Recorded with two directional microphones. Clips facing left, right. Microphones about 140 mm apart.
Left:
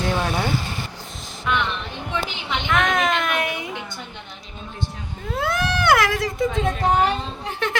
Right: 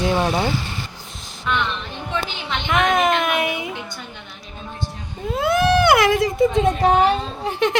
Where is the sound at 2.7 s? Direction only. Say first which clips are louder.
Right 3 dB; 10° right (ahead or behind).